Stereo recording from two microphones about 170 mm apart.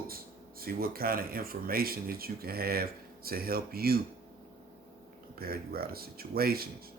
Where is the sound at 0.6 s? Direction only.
60° right (ahead or behind).